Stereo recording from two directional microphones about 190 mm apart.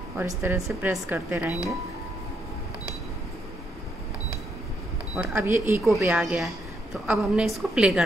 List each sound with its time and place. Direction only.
0.2 s speech: 10° right (ahead or behind)
5.1 s a woman's voice: 10° right (ahead or behind)